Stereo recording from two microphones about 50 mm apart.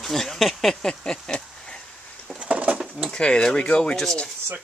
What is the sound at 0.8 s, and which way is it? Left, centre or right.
Speech, centre.